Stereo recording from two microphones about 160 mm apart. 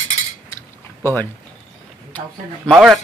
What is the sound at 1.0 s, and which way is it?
Speech, 15° left (ahead or behind).